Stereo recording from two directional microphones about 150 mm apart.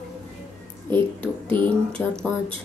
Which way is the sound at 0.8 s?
15° left (ahead or behind).